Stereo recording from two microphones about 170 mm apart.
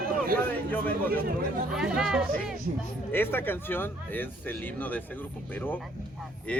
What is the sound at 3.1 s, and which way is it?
Speech, 10° left (ahead or behind).